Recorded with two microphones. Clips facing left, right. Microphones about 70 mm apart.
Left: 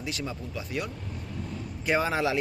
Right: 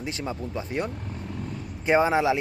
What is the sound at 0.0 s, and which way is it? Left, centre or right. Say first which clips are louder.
Speech: right 3 dB; right.